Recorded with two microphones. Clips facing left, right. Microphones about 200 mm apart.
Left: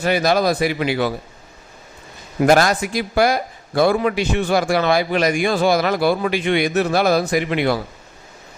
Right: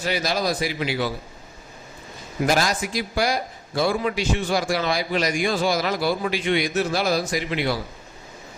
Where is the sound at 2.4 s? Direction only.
60° left (ahead or behind).